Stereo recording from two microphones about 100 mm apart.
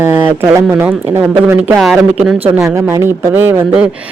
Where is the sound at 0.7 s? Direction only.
15° right (ahead or behind).